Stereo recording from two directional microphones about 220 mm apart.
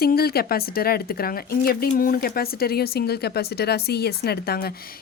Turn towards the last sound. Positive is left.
turn(degrees=40)  # may be behind; listen again after turning